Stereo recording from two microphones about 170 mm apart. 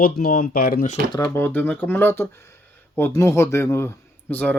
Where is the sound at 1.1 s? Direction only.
20° left (ahead or behind).